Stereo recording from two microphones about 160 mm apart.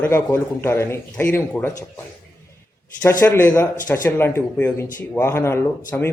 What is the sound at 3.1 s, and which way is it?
Speech, 15° left (ahead or behind).